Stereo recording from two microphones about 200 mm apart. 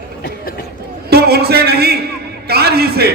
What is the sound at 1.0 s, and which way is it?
Speech, 50° right (ahead or behind).